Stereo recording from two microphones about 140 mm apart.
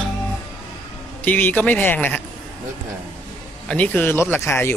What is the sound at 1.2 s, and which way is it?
Speech, 15° left (ahead or behind).